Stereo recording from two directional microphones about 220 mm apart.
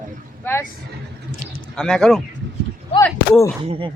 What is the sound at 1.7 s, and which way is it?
Speech, 5° left (ahead or behind).